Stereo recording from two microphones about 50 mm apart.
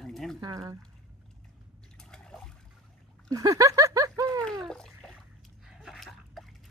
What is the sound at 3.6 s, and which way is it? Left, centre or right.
Snicker, right.